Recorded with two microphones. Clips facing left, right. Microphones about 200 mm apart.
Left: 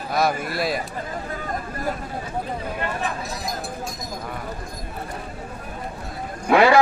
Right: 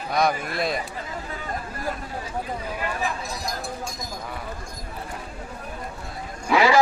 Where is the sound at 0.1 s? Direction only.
5° left (ahead or behind).